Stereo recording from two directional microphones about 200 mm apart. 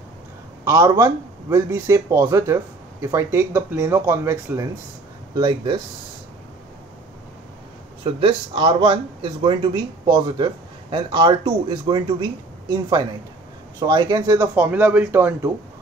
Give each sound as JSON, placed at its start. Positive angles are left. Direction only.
{"t": 0.7, "sound": "speech", "side_deg": -15}
{"t": 8.0, "sound": "speech", "side_deg": -25}